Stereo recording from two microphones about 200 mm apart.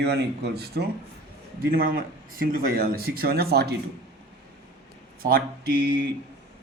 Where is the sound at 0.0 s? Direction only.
55° right (ahead or behind).